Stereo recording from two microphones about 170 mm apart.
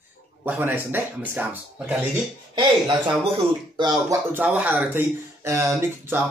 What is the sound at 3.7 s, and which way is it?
Speech, 25° right (ahead or behind).